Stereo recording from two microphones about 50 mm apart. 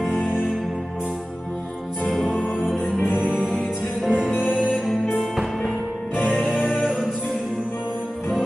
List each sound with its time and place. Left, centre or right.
0.0 s music: centre
2.2 s music: centre
6.1 s music: left
6.4 s music: centre